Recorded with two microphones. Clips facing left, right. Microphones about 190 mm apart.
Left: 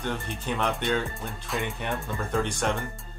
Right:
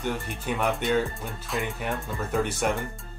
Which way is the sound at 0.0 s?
10° right (ahead or behind).